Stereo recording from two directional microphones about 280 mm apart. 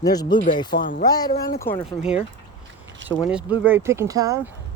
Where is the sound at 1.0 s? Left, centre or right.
Centre.